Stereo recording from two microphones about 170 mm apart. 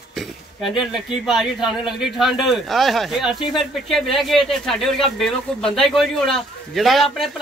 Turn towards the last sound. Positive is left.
turn(degrees=0)  # may be behind; listen again after turning